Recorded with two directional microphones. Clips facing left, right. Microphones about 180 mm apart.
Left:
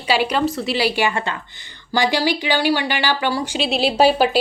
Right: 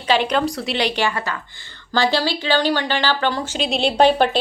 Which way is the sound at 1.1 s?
25° left (ahead or behind).